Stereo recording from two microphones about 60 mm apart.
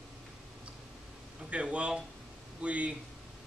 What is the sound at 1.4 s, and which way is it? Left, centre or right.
Speech, centre.